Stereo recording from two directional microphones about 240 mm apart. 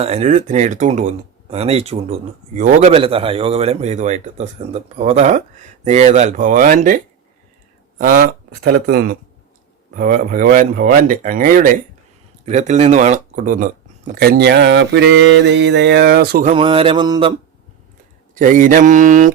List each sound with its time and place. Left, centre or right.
0.0 s a man's voice: right
16.5 s a man's voice: right
18.3 s speech: right